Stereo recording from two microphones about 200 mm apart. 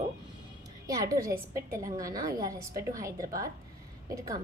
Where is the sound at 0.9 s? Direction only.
15° right (ahead or behind).